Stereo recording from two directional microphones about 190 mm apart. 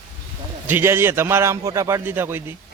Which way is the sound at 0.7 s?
10° right (ahead or behind).